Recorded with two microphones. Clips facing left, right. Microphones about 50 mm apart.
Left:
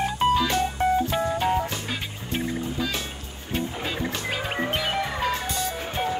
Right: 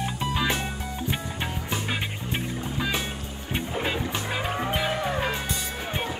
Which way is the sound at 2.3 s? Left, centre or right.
Centre.